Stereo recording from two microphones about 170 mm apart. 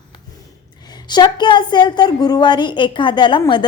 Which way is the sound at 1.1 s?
25° left (ahead or behind).